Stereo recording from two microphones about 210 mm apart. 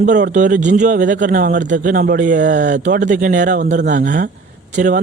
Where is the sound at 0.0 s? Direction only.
35° right (ahead or behind).